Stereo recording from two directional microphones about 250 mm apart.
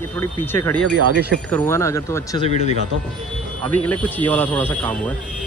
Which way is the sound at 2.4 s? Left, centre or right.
Left.